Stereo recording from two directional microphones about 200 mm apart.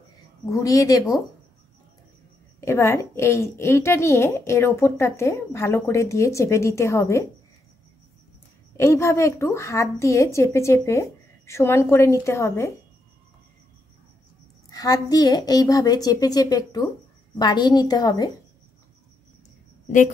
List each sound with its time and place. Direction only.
0.5 s a woman's voice: 15° left (ahead or behind)
2.6 s a woman's voice: 15° left (ahead or behind)
8.7 s a woman's voice: 15° left (ahead or behind)
14.7 s a woman's voice: 20° left (ahead or behind)